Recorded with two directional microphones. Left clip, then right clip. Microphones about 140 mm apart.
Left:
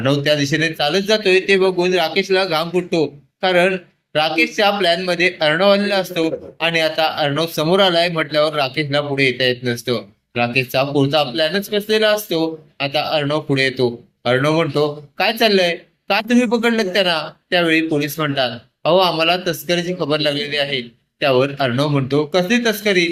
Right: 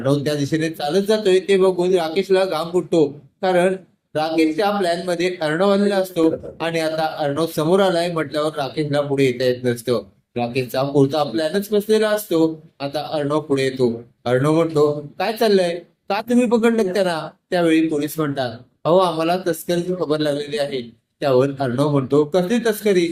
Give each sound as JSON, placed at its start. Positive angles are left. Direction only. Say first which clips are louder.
{"t": 0.0, "sound": "speech", "louder": "left 4 dB", "side_deg": -5}